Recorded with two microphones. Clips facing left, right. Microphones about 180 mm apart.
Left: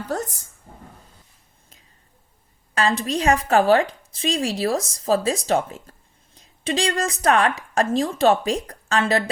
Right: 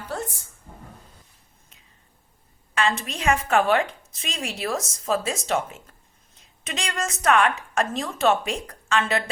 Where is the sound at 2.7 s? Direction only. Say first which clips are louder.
Left 4 dB; 35° left (ahead or behind).